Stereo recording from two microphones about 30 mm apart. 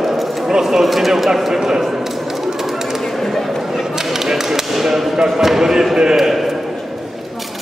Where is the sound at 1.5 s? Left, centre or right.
Centre.